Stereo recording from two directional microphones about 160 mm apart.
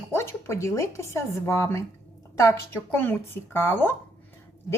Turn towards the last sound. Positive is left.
turn(degrees=15)  # may be behind; listen again after turning